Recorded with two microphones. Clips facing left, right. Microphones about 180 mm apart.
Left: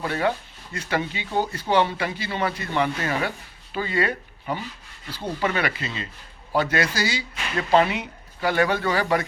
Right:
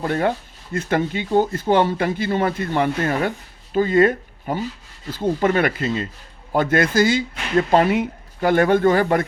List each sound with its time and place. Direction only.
0.0 s speech: 50° right (ahead or behind)